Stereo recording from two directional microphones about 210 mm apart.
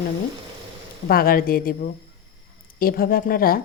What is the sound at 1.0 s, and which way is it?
A woman's voice, 45° left (ahead or behind).